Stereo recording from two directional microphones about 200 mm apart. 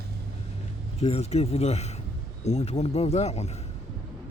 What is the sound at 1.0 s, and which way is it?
Speech, 30° left (ahead or behind).